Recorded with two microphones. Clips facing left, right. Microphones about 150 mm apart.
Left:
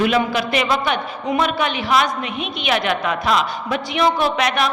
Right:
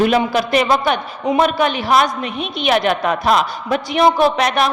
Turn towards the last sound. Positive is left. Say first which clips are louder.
# right 4 dB
turn(degrees=-40)  # may be behind; listen again after turning